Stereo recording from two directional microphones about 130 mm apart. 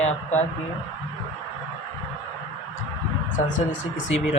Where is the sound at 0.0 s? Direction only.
65° left (ahead or behind).